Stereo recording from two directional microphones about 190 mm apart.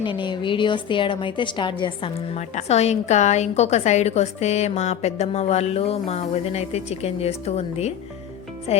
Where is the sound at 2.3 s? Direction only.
35° left (ahead or behind).